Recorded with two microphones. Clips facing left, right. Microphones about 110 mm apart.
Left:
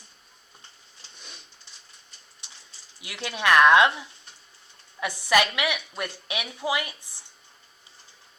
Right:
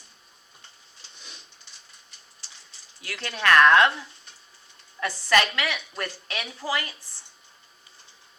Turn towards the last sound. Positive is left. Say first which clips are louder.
# left 2 dB
turn(degrees=15)  # may be behind; listen again after turning